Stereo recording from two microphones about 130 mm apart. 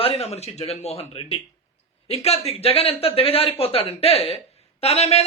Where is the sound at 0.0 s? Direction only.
50° left (ahead or behind).